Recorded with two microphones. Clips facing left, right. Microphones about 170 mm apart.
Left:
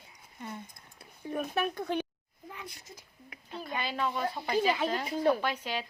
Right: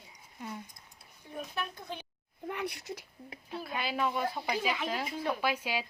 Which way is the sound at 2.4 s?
70° right (ahead or behind).